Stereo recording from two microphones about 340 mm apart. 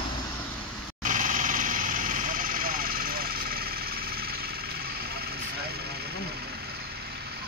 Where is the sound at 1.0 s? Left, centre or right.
Right.